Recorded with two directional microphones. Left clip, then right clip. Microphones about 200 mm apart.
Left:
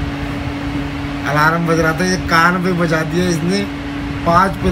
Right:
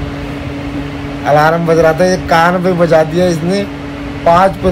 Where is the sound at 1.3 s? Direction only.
55° right (ahead or behind).